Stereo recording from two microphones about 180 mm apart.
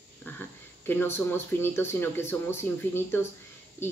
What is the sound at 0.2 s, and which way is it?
Speech, 10° left (ahead or behind).